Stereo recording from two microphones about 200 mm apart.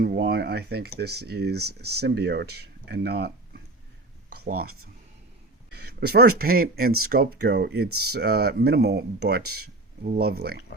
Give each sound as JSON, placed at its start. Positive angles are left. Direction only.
{"t": 0.0, "sound": "speech", "side_deg": -50}
{"t": 5.7, "sound": "speech", "side_deg": -50}